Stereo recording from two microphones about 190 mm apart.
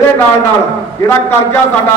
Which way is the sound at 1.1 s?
10° left (ahead or behind).